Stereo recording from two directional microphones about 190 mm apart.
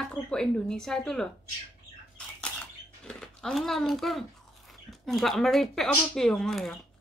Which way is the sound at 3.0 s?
Centre (ahead or behind).